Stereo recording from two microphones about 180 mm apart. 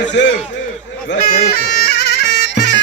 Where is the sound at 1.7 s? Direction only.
65° left (ahead or behind).